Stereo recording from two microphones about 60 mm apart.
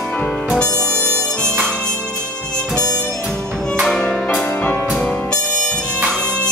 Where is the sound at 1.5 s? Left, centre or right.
Right.